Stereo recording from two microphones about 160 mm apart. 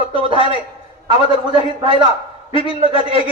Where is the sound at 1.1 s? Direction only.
35° left (ahead or behind).